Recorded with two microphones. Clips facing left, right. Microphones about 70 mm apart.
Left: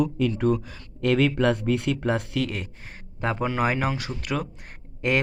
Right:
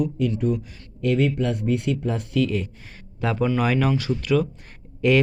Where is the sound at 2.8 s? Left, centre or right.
Left.